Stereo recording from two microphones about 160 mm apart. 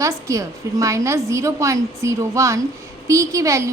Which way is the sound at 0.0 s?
20° right (ahead or behind).